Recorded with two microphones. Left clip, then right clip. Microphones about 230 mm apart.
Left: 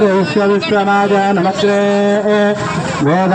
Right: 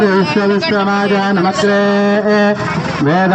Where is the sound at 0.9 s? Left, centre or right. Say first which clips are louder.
Left 2 dB; left.